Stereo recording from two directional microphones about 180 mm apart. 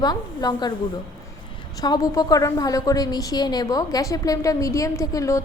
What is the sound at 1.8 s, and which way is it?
A woman's voice, 20° left (ahead or behind).